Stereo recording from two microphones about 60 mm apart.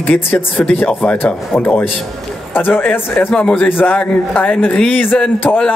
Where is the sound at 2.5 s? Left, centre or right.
Left.